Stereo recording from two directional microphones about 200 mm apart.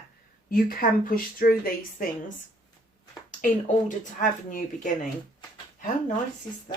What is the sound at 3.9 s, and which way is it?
Speech, 40° left (ahead or behind).